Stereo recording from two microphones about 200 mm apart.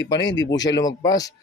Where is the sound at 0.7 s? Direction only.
20° left (ahead or behind).